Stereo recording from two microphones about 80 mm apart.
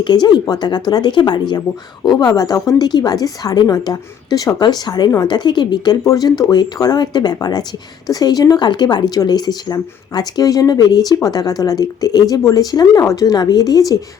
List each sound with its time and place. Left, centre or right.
0.0 s a woman's voice: left
6.1 s speech: left